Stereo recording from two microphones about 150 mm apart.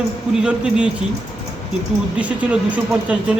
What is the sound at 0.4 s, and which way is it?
Speech, 5° right (ahead or behind).